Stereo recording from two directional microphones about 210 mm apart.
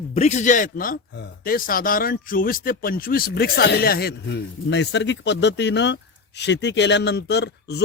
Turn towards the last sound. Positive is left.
turn(degrees=55)  # may be behind; listen again after turning